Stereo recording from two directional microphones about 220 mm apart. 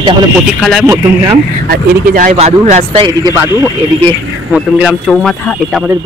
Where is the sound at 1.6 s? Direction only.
40° right (ahead or behind).